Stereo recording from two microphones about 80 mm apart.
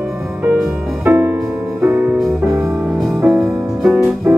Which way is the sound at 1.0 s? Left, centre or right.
Right.